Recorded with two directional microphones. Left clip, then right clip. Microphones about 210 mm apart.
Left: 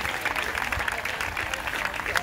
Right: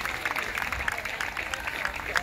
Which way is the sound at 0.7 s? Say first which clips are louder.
Left 2 dB; 25° left (ahead or behind).